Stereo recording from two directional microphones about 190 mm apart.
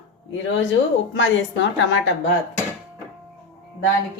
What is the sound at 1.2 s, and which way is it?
Speech, 75° left (ahead or behind).